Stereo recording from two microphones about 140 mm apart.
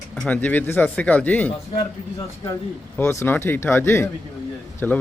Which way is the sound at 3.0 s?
20° left (ahead or behind).